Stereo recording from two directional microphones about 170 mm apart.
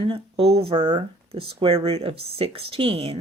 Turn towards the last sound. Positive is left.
turn(degrees=-35)  # may be behind; listen again after turning